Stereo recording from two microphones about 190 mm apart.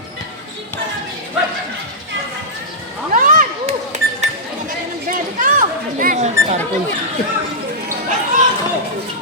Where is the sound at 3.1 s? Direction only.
45° right (ahead or behind).